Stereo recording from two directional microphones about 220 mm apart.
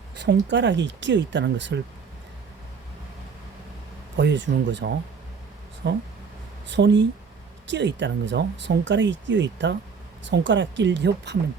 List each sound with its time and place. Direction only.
0.2 s speech: 50° right (ahead or behind)
4.2 s speech: 55° right (ahead or behind)